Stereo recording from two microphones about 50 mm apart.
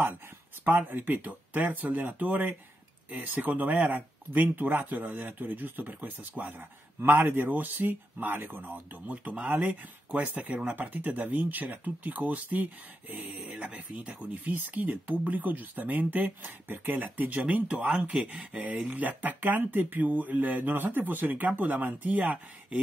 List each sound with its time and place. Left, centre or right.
0.8 s speech: right
13.7 s speech: right